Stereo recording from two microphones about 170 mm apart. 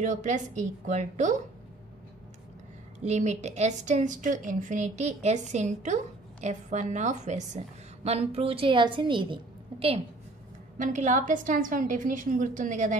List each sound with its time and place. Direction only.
0.0 s a woman's voice: 45° right (ahead or behind)
3.0 s a woman's voice: 40° right (ahead or behind)
10.8 s a woman's voice: 45° right (ahead or behind)